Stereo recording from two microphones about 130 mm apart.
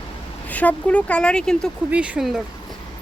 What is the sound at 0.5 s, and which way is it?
Speech, 10° left (ahead or behind).